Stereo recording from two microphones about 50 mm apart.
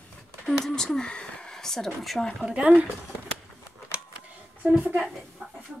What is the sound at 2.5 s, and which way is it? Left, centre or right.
Speech, right.